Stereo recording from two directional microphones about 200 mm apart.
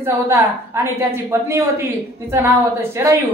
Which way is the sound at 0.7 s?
15° right (ahead or behind).